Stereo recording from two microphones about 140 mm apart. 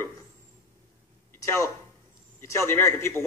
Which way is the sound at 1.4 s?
20° left (ahead or behind).